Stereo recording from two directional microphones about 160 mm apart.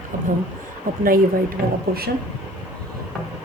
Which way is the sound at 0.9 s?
60° right (ahead or behind).